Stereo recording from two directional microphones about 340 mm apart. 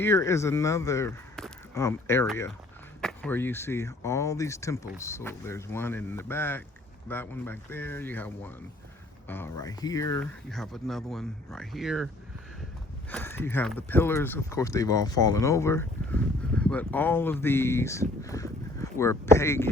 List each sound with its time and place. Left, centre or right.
0.0 s speech: centre
13.1 s speech: centre